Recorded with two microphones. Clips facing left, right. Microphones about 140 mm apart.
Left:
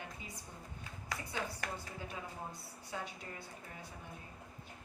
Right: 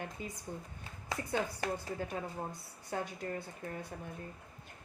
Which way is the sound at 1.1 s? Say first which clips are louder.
Right 6 dB; 25° right (ahead or behind).